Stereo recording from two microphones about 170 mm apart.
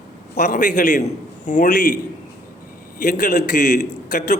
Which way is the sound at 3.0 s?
55° left (ahead or behind).